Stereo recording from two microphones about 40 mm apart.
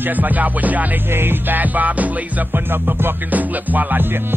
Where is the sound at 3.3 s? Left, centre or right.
Right.